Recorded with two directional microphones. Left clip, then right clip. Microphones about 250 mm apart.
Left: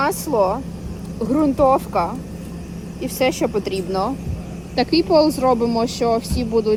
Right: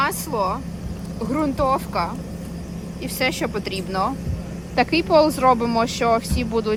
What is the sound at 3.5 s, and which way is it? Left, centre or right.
Speech, right.